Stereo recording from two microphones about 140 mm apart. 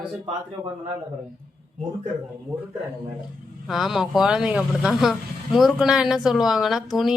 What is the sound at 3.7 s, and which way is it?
Speech, centre (ahead or behind).